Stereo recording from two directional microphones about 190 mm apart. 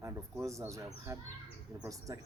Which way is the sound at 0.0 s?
15° right (ahead or behind).